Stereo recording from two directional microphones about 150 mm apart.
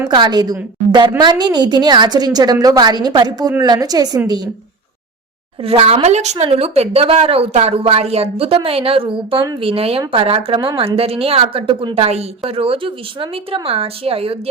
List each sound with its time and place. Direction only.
0.1 s a woman's voice: 30° right (ahead or behind)
5.6 s a woman's voice: 40° right (ahead or behind)